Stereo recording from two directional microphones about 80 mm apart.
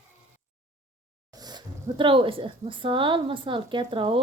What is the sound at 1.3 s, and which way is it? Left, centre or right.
Speech, right.